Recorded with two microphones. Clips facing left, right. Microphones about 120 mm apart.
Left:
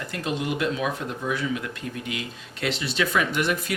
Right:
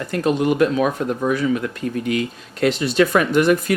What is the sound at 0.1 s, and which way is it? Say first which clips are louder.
Speech: right 10 dB; 45° right (ahead or behind).